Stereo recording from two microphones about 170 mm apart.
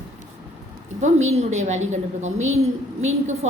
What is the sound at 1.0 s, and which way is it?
A woman's voice, 40° right (ahead or behind).